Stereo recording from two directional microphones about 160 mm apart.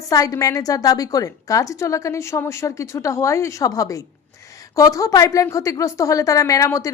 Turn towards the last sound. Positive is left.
turn(degrees=20)  # may be behind; listen again after turning